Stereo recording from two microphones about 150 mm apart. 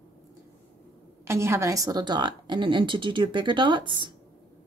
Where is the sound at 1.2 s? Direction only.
20° right (ahead or behind).